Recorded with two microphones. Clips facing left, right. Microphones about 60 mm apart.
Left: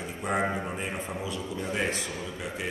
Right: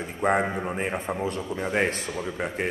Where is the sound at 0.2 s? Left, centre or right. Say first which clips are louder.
Right 5 dB; right.